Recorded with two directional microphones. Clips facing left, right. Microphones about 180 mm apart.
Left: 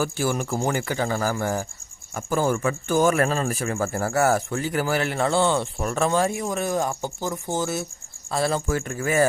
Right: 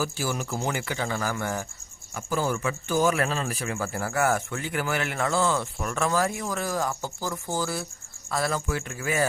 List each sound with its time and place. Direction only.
0.0 s a man's voice: 55° left (ahead or behind); by 1.6 s 35° left (ahead or behind)
2.1 s a man's voice: 50° left (ahead or behind); by 8.6 s 30° left (ahead or behind)
8.6 s speech: 45° left (ahead or behind)